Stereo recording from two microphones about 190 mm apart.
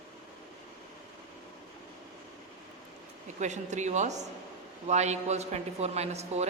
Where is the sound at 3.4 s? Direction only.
40° right (ahead or behind).